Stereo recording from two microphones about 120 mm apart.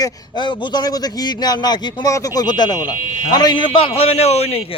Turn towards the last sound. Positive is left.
turn(degrees=60)  # may be behind; listen again after turning